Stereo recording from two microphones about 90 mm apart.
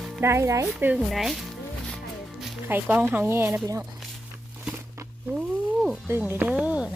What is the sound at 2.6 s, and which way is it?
Speech, 20° right (ahead or behind).